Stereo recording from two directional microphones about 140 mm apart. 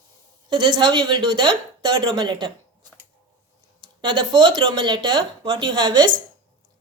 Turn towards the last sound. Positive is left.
turn(degrees=-35)  # may be behind; listen again after turning